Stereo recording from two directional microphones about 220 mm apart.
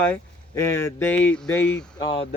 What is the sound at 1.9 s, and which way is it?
Speech, 20° left (ahead or behind).